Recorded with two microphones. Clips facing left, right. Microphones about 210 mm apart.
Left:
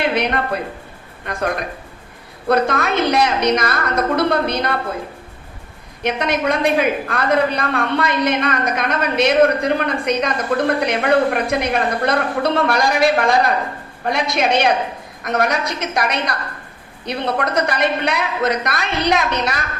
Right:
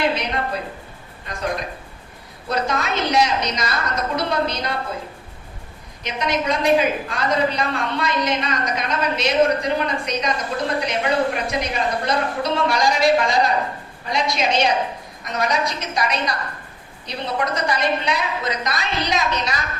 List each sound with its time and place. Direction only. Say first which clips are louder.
0.1 s a woman's voice: left 5 dB; 60° left (ahead or behind)
6.0 s a woman's voice: left 4 dB; 60° left (ahead or behind)